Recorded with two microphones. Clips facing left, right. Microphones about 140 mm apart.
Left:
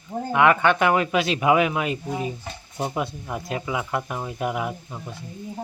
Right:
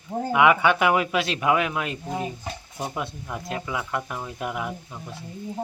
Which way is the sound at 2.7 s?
15° left (ahead or behind).